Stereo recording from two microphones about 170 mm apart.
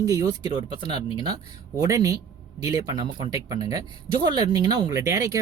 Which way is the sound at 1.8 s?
20° right (ahead or behind).